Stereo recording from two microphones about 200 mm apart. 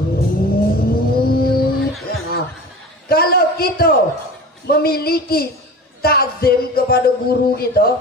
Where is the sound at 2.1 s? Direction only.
50° left (ahead or behind).